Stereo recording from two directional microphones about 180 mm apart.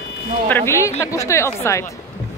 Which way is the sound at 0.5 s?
10° left (ahead or behind).